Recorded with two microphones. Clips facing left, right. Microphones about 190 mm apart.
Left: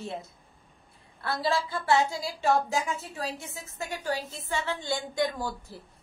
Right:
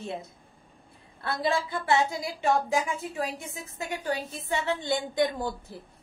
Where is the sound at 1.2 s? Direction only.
20° right (ahead or behind).